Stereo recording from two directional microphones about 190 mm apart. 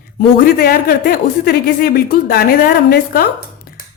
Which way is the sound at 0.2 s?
50° left (ahead or behind).